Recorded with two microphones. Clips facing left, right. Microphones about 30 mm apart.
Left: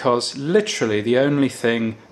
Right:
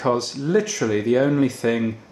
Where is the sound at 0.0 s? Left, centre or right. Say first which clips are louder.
Left 2 dB; left.